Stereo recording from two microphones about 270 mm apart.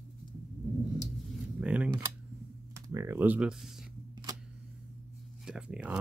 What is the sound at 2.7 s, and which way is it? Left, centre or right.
Computer keyboard, centre.